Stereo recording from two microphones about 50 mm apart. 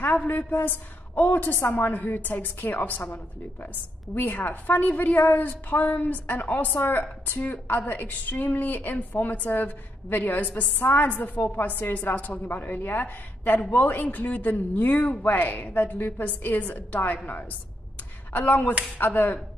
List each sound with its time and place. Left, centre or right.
0.2 s a woman's voice: left